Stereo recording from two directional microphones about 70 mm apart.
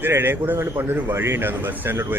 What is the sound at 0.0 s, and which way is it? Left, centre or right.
A man's voice, right.